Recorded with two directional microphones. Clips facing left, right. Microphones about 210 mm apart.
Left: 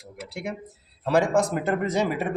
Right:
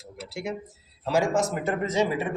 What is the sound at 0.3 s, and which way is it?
A man's voice, 55° left (ahead or behind).